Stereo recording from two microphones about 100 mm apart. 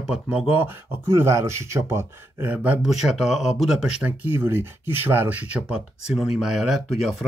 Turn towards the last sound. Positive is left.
turn(degrees=-5)  # may be behind; listen again after turning